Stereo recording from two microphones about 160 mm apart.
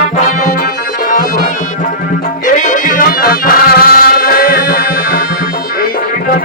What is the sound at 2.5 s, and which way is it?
Music, 50° left (ahead or behind).